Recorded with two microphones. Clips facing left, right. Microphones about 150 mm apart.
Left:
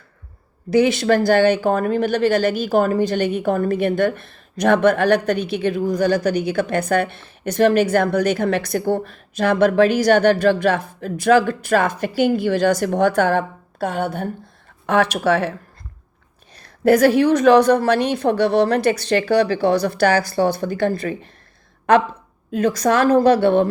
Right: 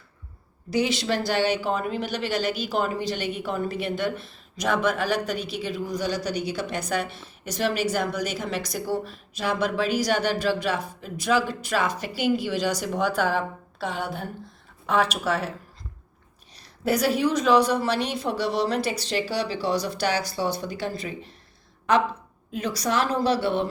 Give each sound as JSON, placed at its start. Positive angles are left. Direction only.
{"t": 0.7, "sound": "speech", "side_deg": 55}
{"t": 14.8, "sound": "speech", "side_deg": 70}
{"t": 16.6, "sound": "a woman's voice", "side_deg": 55}
{"t": 22.5, "sound": "speech", "side_deg": 50}